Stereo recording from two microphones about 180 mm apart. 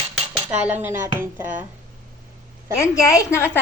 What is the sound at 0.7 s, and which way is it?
Speech, 10° right (ahead or behind).